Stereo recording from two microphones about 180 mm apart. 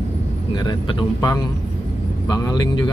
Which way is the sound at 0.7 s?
25° left (ahead or behind).